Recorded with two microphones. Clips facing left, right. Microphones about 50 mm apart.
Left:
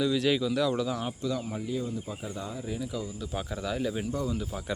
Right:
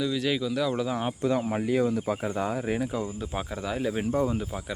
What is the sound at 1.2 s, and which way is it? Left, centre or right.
Speech, right.